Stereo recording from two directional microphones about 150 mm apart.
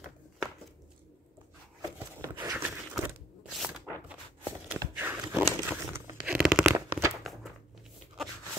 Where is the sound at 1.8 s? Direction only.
25° right (ahead or behind).